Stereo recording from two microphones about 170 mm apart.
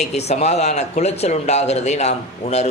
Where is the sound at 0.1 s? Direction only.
40° left (ahead or behind).